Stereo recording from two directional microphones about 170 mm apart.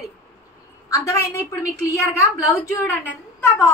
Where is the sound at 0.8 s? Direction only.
20° left (ahead or behind).